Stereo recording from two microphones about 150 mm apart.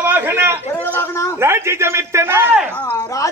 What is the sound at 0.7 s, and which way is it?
Speech, 10° left (ahead or behind).